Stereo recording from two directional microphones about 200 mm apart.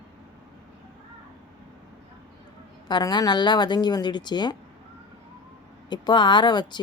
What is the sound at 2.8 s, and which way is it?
Speech, 20° left (ahead or behind).